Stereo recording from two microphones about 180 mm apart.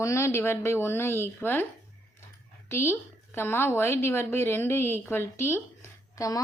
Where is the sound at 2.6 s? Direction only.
15° left (ahead or behind).